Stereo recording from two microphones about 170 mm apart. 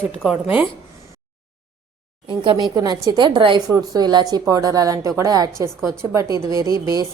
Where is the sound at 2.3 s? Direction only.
25° right (ahead or behind).